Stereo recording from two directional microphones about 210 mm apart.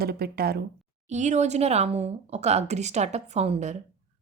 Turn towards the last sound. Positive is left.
turn(degrees=-30)  # may be behind; listen again after turning